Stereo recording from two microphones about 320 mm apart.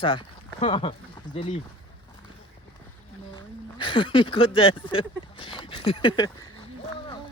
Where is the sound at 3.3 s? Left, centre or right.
Centre.